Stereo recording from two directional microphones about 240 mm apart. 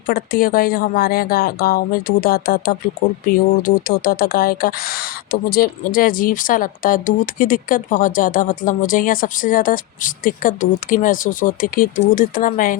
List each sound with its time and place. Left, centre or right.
0.1 s speech: left